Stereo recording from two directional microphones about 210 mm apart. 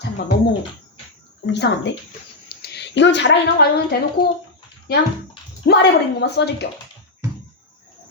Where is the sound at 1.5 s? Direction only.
55° left (ahead or behind).